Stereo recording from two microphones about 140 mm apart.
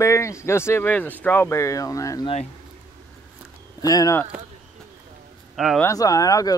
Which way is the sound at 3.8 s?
25° left (ahead or behind).